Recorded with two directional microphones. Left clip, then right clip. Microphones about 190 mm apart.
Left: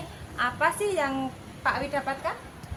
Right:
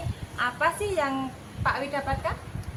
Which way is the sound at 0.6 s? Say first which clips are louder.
Even; 25° left (ahead or behind).